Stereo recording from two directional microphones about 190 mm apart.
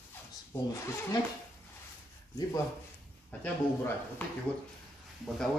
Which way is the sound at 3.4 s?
10° left (ahead or behind).